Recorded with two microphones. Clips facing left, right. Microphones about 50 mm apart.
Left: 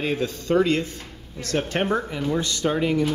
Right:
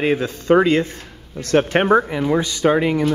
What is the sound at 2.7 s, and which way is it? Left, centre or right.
Speech, right.